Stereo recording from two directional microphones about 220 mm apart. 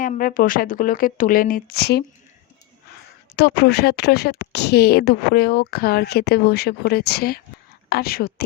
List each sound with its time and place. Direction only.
0.0 s a woman's voice: 40° left (ahead or behind)
3.3 s a woman's voice: 45° left (ahead or behind)